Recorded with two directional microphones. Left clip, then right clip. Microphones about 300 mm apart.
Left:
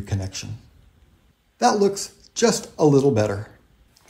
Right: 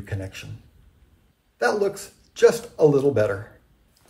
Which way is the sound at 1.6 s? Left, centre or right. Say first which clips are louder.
Left 3 dB; left.